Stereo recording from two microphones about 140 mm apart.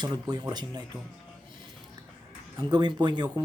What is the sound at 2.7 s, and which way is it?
Speech, 30° right (ahead or behind).